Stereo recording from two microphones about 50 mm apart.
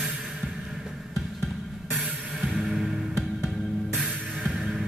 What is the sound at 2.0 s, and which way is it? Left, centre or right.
Music, right.